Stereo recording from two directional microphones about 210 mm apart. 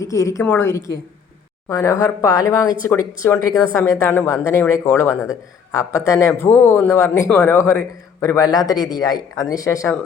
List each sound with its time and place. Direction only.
0.0 s a man's voice: 15° left (ahead or behind)